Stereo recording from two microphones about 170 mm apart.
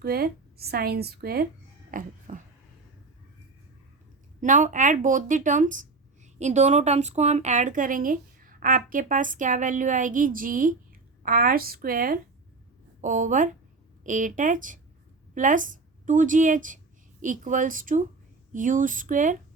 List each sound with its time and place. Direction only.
0.0 s a woman's voice: 65° right (ahead or behind)
1.9 s speech: 50° right (ahead or behind)
4.4 s a woman's voice: 50° right (ahead or behind)